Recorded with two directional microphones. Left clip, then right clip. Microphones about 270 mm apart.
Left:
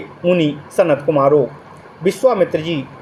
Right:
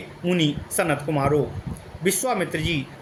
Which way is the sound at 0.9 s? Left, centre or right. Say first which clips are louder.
Left 9 dB; right.